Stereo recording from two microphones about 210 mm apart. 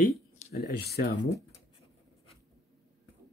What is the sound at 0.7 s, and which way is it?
Speech, 50° left (ahead or behind).